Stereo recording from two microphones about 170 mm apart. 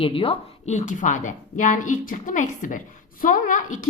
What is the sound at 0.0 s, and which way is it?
A woman's voice, 30° left (ahead or behind).